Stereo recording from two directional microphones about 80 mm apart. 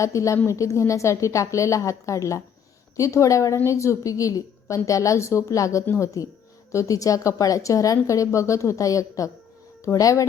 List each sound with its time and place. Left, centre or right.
0.0 s a woman's voice: left
5.8 s a woman's voice: left
6.7 s a woman's voice: left